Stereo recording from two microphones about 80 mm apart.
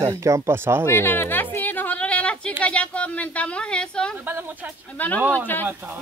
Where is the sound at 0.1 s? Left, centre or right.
Right.